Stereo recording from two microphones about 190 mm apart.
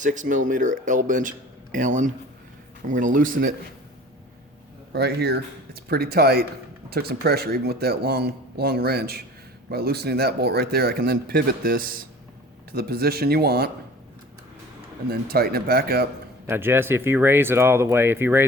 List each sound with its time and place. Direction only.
0.0 s speech: 40° right (ahead or behind)
4.9 s speech: 60° right (ahead or behind)
15.1 s speech: 55° right (ahead or behind)
16.5 s speech: 10° right (ahead or behind)